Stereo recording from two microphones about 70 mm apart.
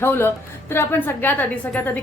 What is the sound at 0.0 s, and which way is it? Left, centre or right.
A woman's voice, left.